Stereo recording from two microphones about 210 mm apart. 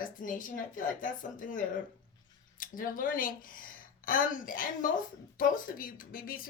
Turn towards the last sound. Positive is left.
turn(degrees=40)  # may be behind; listen again after turning